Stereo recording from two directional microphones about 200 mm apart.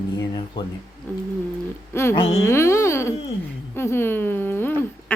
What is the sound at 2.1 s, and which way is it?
Speech, 30° left (ahead or behind).